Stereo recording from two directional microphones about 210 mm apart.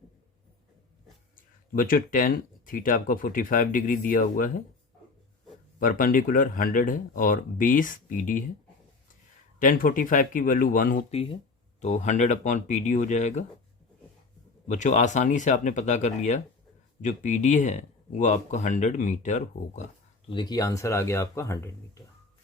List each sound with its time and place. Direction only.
1.7 s speech: 40° left (ahead or behind)
5.8 s speech: 40° left (ahead or behind)
9.6 s speech: 40° left (ahead or behind)
14.7 s speech: 35° left (ahead or behind)
20.3 s speech: 20° left (ahead or behind)